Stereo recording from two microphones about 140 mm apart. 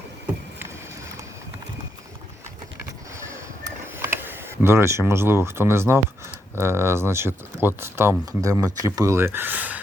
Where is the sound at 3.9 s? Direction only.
15° right (ahead or behind).